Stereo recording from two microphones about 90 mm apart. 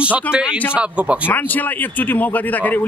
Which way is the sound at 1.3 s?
20° left (ahead or behind).